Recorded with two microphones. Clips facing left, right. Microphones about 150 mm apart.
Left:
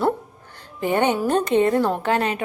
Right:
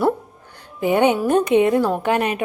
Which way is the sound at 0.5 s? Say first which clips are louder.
Right 3 dB; 10° right (ahead or behind).